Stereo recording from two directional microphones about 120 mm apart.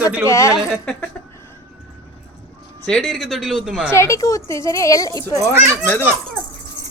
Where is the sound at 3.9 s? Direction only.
25° left (ahead or behind).